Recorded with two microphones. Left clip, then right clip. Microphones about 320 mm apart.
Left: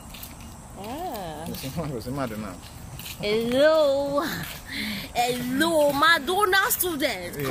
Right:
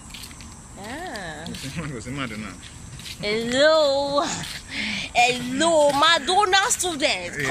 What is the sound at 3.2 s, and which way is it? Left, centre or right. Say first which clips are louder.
Speech: right 1 dB; centre.